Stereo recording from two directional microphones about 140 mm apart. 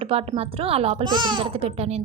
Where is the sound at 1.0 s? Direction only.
30° right (ahead or behind).